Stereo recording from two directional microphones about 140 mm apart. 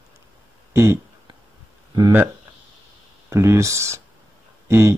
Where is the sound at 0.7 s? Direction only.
20° right (ahead or behind).